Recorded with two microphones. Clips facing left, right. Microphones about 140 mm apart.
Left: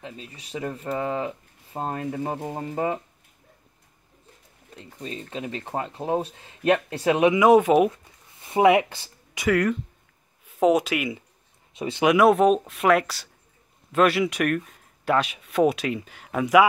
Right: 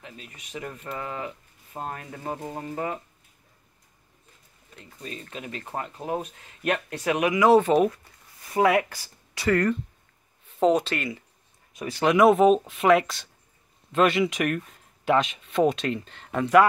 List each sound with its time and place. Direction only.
0.0 s speech: 30° left (ahead or behind)
4.7 s speech: 30° left (ahead or behind)
7.9 s a sound: 25° left (ahead or behind)
10.4 s speech: 10° left (ahead or behind)
11.7 s a sound: 20° left (ahead or behind)
12.0 s speech: 5° left (ahead or behind)